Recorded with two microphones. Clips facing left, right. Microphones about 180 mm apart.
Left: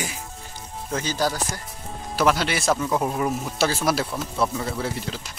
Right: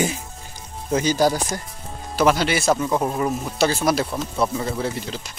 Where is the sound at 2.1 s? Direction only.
Centre (ahead or behind).